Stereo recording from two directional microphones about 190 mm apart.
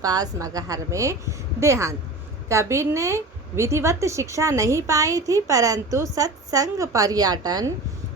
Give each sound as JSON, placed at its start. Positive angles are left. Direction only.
{"t": 0.0, "sound": "a woman's voice", "side_deg": -20}